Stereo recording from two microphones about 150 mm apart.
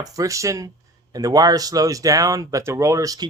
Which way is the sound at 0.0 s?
25° right (ahead or behind).